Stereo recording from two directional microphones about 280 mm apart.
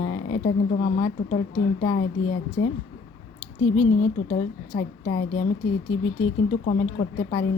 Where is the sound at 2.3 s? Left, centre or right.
Left.